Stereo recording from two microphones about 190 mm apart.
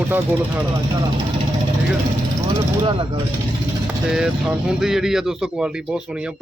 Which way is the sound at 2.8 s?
25° right (ahead or behind).